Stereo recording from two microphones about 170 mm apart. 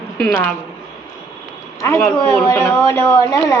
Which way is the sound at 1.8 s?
15° left (ahead or behind).